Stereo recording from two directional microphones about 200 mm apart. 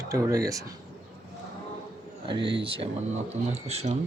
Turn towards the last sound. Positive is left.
turn(degrees=-30)  # may be behind; listen again after turning